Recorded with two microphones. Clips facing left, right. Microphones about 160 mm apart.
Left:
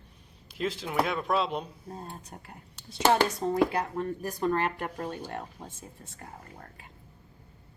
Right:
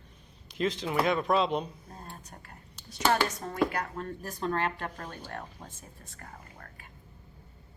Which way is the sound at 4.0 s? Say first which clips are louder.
Left 5 dB; 10° left (ahead or behind).